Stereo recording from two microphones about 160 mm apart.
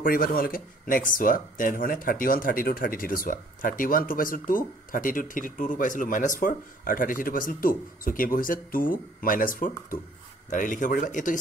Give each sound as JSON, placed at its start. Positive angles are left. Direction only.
{"t": 0.0, "sound": "speech", "side_deg": 65}